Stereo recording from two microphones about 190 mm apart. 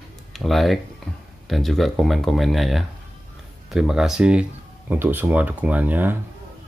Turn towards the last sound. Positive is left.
turn(degrees=-10)  # may be behind; listen again after turning